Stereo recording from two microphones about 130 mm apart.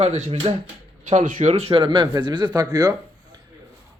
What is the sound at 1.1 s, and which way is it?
Speech, 80° right.